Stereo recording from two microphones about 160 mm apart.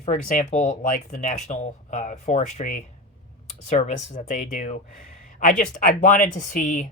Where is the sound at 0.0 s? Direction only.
50° left (ahead or behind).